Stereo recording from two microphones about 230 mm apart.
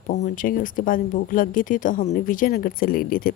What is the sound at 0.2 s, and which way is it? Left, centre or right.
Speech, left.